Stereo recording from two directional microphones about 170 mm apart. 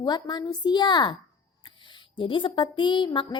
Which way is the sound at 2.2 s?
30° left (ahead or behind).